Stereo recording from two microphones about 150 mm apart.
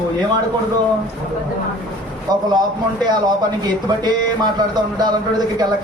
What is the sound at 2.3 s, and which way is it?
Speech, 25° right (ahead or behind).